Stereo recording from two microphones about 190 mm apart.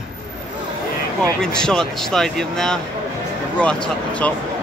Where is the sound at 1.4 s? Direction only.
5° left (ahead or behind).